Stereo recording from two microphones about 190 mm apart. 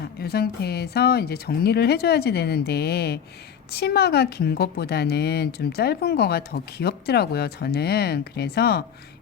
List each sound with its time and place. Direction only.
0.0 s a woman's voice: 55° left (ahead or behind)